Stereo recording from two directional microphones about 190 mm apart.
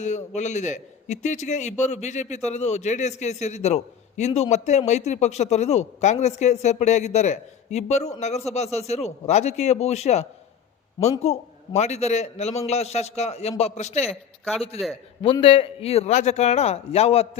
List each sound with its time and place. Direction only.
0.0 s a man's voice: 40° left (ahead or behind)